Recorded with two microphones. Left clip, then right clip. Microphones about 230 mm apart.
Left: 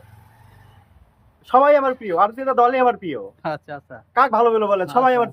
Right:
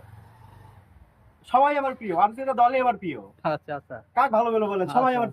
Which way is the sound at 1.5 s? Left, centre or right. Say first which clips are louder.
Left 7 dB; centre.